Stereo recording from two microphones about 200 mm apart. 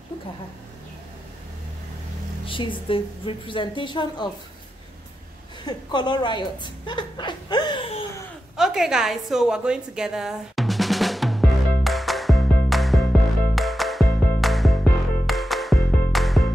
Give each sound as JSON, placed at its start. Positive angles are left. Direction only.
{"t": 2.4, "sound": "a woman's voice", "side_deg": 25}
{"t": 5.7, "sound": "a woman's voice", "side_deg": 20}
{"t": 8.5, "sound": "a sound", "side_deg": 0}
{"t": 13.6, "sound": "music", "side_deg": 0}